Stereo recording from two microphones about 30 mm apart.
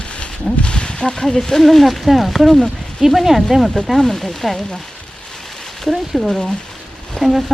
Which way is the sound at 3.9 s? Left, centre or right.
Centre.